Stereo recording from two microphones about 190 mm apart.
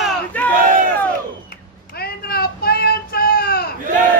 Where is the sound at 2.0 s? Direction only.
55° left (ahead or behind).